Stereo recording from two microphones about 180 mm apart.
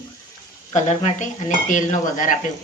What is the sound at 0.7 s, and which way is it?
Dishes, 45° left (ahead or behind).